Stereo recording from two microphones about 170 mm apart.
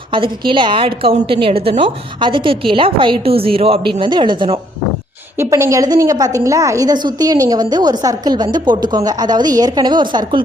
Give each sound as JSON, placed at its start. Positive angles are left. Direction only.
{"t": 0.1, "sound": "a woman's voice", "side_deg": -30}
{"t": 5.4, "sound": "a woman's voice", "side_deg": -15}